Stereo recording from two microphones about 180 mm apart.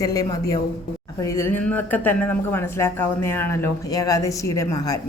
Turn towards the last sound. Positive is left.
turn(degrees=20)  # may be behind; listen again after turning